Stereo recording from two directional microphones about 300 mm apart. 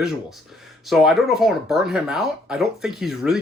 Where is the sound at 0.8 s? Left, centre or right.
Centre.